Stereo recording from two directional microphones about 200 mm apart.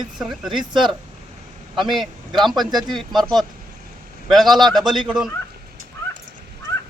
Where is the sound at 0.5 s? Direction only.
25° right (ahead or behind).